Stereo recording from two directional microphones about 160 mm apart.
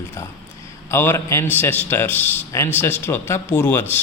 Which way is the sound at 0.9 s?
15° left (ahead or behind).